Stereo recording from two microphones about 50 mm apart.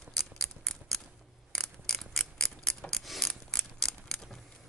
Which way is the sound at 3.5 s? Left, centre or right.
Centre.